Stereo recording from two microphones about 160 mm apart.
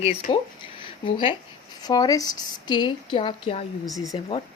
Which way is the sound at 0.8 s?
30° left (ahead or behind).